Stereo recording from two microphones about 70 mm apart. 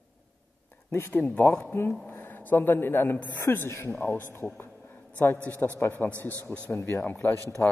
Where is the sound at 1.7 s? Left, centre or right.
Left.